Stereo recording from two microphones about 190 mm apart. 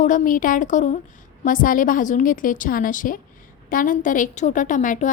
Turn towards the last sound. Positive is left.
turn(degrees=40)  # may be behind; listen again after turning